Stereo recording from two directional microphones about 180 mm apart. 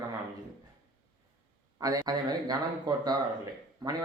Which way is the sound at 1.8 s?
20° right (ahead or behind).